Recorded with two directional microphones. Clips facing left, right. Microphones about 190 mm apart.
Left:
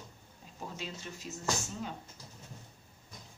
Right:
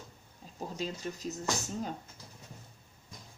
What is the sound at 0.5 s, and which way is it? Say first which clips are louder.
Speech: right 5 dB; 40° right (ahead or behind).